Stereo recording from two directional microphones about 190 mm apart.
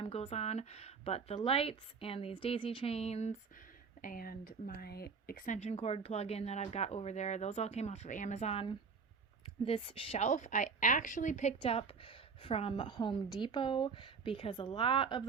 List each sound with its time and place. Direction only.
0.0 s a woman's voice: 35° left (ahead or behind)
4.0 s speech: 50° left (ahead or behind)
5.5 s speech: 35° left (ahead or behind)
11.6 s a woman's voice: 30° left (ahead or behind)